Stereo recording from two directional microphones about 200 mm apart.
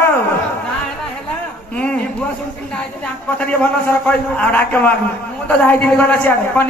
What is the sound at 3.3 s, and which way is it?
A man's voice, 10° left (ahead or behind).